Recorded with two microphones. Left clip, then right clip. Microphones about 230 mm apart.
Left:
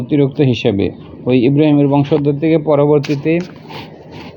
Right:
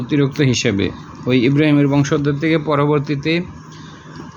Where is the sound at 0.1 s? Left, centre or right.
Centre.